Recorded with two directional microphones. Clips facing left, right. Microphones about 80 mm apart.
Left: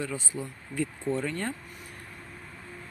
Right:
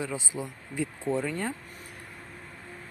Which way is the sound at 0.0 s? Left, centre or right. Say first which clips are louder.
Right 1 dB; centre.